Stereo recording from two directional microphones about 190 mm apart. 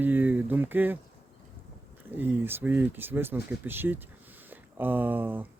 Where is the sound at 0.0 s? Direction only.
10° right (ahead or behind).